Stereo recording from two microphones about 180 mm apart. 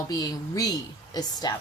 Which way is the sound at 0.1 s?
20° left (ahead or behind).